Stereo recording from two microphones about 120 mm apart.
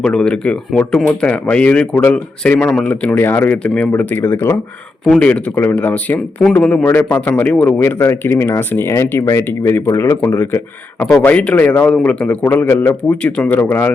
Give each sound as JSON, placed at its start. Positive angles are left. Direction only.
{"t": 0.0, "sound": "speech", "side_deg": 5}
{"t": 5.0, "sound": "speech", "side_deg": 10}